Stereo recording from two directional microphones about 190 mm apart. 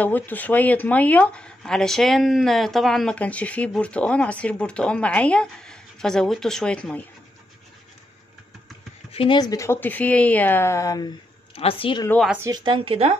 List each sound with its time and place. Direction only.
0.0 s speech: 10° left (ahead or behind)
9.1 s speech: 25° left (ahead or behind)
11.5 s a woman's voice: 30° left (ahead or behind)
12.4 s speech: 25° right (ahead or behind)